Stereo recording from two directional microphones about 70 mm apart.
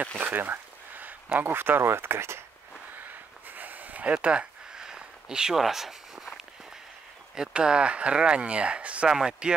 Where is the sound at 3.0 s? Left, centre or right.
Right; by 6.4 s centre.